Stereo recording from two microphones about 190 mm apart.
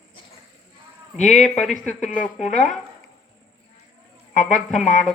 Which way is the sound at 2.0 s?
40° left (ahead or behind).